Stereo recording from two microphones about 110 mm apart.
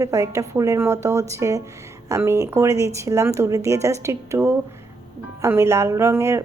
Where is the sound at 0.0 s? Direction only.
30° right (ahead or behind).